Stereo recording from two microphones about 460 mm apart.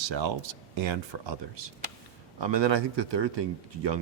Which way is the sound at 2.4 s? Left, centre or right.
Right.